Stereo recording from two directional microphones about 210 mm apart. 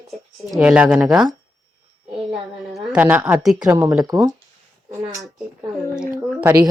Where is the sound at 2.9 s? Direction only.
5° right (ahead or behind).